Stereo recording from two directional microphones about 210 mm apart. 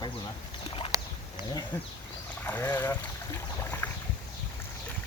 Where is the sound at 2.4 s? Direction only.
10° left (ahead or behind).